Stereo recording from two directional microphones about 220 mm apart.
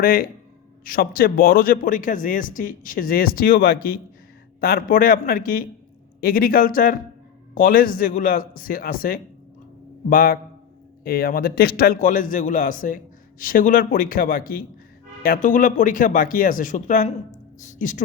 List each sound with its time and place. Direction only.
0.0 s speech: 40° left (ahead or behind)